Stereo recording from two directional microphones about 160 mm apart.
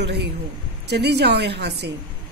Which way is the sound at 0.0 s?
90° right.